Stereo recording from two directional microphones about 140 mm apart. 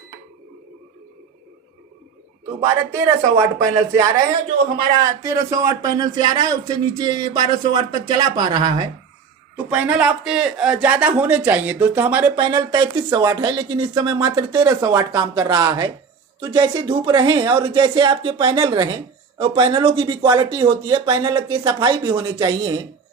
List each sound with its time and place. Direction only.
2.9 s a man's voice: 25° right (ahead or behind)
9.6 s speech: 10° right (ahead or behind)
12.4 s speech: 35° right (ahead or behind)